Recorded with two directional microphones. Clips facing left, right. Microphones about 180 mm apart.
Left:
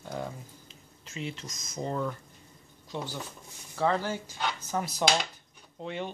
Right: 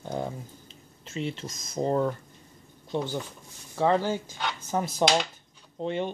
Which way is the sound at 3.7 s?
20° right (ahead or behind).